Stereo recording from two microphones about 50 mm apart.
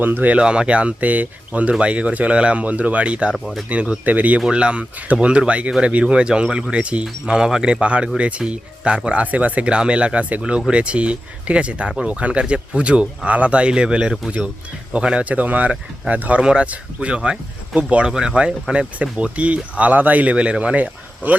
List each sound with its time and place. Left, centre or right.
0.0 s speech: right
0.3 s speech: centre
3.3 s speech: centre
3.7 s speech: right